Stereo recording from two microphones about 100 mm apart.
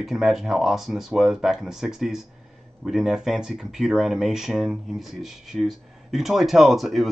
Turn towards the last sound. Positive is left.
turn(degrees=0)  # may be behind; listen again after turning